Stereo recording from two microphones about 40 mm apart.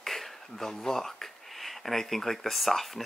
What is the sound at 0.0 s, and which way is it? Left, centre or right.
Speech, centre.